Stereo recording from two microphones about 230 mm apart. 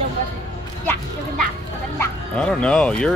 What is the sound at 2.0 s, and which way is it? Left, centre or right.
Speech, centre.